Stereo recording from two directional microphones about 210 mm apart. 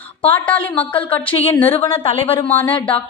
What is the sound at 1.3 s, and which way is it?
Speech, 30° left (ahead or behind).